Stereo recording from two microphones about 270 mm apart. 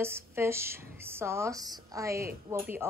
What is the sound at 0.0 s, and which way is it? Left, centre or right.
Speech, centre.